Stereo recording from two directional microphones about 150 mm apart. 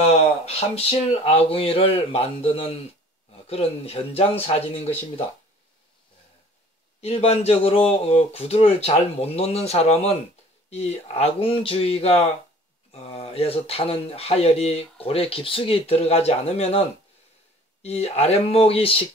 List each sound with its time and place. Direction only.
0.0 s speech: 45° left (ahead or behind)
7.0 s speech: 45° left (ahead or behind)
17.8 s speech: 45° left (ahead or behind)